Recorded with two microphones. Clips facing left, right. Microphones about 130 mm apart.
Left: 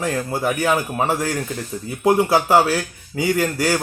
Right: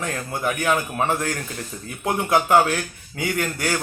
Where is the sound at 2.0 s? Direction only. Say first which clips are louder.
Left 5 dB; 30° left (ahead or behind).